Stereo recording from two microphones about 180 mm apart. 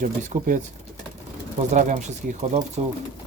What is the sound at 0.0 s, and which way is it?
Speech, 45° right (ahead or behind).